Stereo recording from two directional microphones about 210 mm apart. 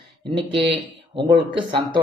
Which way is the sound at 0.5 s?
25° right (ahead or behind).